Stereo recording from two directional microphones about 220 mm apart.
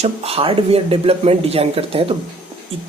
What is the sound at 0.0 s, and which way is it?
Speech, 25° right (ahead or behind).